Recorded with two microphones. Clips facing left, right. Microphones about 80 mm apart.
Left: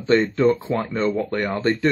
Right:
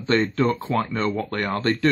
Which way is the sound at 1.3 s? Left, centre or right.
Right.